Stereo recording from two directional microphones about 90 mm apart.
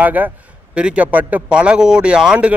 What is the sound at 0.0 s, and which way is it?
Speech, 20° right (ahead or behind).